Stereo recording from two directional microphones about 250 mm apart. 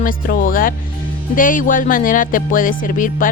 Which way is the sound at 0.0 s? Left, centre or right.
Left.